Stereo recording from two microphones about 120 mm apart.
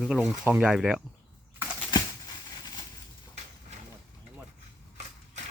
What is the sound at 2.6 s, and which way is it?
Crushing, 35° left (ahead or behind).